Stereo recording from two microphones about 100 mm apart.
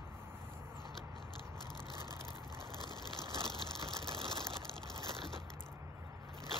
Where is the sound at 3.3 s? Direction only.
65° right (ahead or behind).